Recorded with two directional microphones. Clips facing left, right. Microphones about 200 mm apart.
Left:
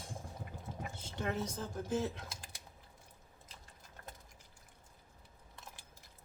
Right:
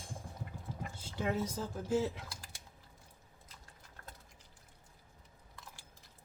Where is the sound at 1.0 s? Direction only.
10° right (ahead or behind).